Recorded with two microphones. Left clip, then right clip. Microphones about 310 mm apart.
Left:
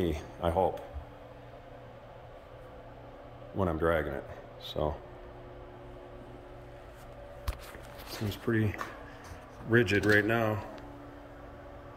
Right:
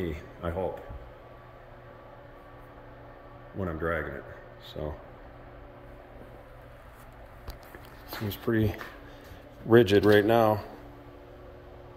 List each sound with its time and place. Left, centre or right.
0.0 s speech: centre
3.5 s a man's voice: centre
8.5 s speech: centre